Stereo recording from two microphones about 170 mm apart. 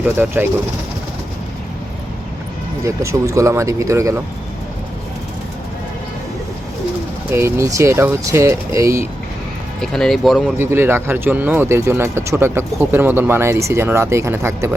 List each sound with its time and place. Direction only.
0.0 s speech: 10° right (ahead or behind)
2.8 s speech: 15° right (ahead or behind)
7.3 s speech: 15° right (ahead or behind)
9.8 s speech: 5° left (ahead or behind)
10.6 s speech: 15° right (ahead or behind)